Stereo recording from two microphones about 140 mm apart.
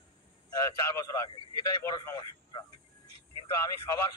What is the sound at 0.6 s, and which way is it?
A man's voice, 20° left (ahead or behind).